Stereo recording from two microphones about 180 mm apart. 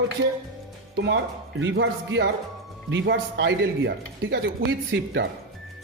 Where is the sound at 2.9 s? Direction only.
85° right.